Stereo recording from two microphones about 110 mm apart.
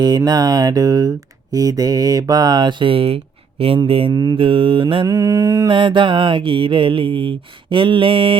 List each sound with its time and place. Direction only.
0.3 s mantra: 40° right (ahead or behind); by 4.1 s 55° right (ahead or behind)
4.1 s mantra: 40° right (ahead or behind)
5.0 s mantra: 35° right (ahead or behind)
5.7 s mantra: 50° right (ahead or behind)